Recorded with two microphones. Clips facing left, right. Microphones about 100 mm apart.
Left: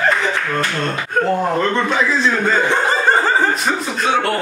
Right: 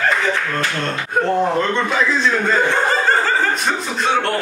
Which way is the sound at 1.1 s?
5° left (ahead or behind).